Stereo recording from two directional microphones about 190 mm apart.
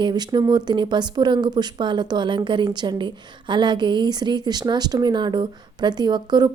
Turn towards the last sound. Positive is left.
turn(degrees=-20)  # may be behind; listen again after turning